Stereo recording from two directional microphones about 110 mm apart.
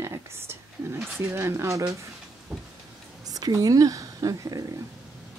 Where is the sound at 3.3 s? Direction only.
35° right (ahead or behind).